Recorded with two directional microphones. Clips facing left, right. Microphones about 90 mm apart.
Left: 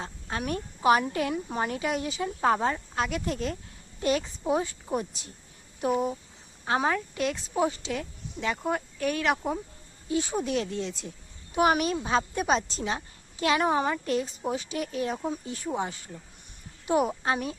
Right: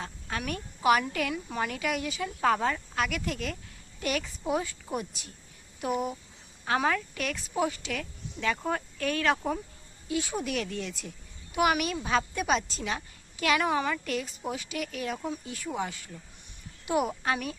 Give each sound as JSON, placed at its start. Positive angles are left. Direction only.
{"t": 0.0, "sound": "a woman's voice", "side_deg": 30}
{"t": 10.1, "sound": "a woman's voice", "side_deg": 30}